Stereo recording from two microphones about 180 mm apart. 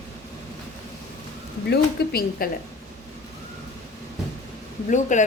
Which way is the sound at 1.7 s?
60° left (ahead or behind).